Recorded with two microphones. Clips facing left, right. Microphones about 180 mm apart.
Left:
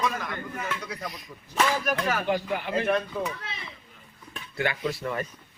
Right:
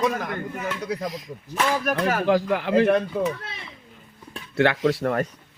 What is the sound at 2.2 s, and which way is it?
Speech, 90° right.